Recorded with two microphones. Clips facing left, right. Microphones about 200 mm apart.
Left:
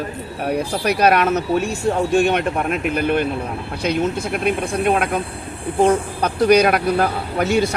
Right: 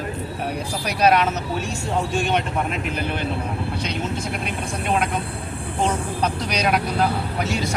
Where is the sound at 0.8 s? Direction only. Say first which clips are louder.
Left 2 dB; 60° left (ahead or behind).